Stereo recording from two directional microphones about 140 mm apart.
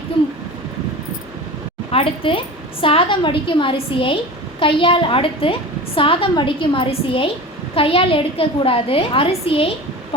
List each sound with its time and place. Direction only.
1.9 s a woman's voice: 40° left (ahead or behind)